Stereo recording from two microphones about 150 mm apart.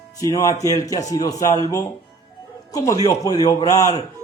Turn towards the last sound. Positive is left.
turn(degrees=20)  # may be behind; listen again after turning